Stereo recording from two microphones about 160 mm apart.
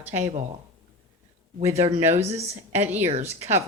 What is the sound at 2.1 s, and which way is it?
Speech, 45° right (ahead or behind).